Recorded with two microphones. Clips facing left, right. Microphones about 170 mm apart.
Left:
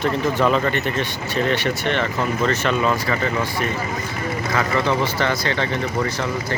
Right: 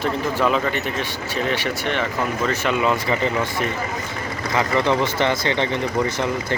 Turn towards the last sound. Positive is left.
turn(degrees=-20)  # may be behind; listen again after turning